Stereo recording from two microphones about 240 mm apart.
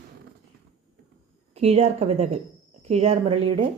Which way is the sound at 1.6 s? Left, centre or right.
Right.